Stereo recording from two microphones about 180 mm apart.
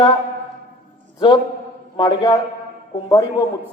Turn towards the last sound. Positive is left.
turn(degrees=20)  # may be behind; listen again after turning